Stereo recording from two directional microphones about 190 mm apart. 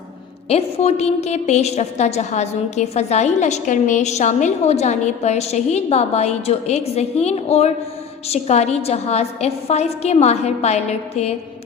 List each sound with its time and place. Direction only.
0.4 s a woman's voice: 35° left (ahead or behind)